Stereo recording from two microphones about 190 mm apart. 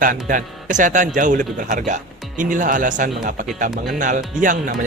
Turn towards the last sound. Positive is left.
turn(degrees=-45)  # may be behind; listen again after turning